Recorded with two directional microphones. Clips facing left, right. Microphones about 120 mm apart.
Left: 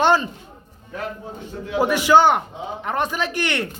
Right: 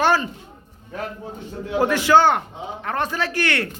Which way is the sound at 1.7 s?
15° left (ahead or behind).